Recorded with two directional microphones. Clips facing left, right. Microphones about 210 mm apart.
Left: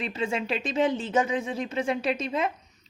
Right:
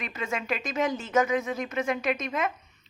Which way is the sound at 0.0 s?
30° left (ahead or behind).